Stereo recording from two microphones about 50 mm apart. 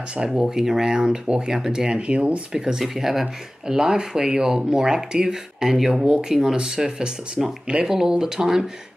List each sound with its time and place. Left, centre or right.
0.3 s speech: centre
1.9 s speech: right
7.6 s speech: centre